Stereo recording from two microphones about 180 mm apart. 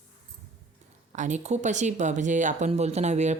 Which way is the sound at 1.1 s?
40° right (ahead or behind).